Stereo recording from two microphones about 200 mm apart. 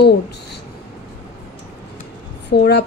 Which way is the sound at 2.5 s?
55° left (ahead or behind).